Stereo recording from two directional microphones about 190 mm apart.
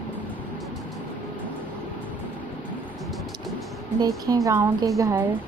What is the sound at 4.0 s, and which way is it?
Speech, 20° right (ahead or behind).